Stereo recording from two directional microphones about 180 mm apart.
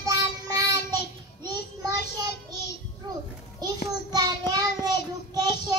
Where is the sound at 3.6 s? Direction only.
20° right (ahead or behind).